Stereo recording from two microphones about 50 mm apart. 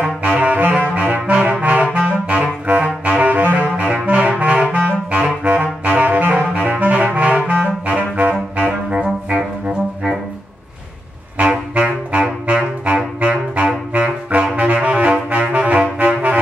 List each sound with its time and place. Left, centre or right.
0.0 s saxophone: right
9.3 s music: right
11.7 s saxophone: right
14.8 s brass instrument: right